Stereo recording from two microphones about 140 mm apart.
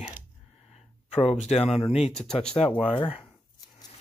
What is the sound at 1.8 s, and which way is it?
Speech, 45° left (ahead or behind).